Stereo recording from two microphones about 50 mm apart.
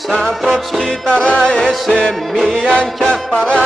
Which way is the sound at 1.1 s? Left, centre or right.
Left.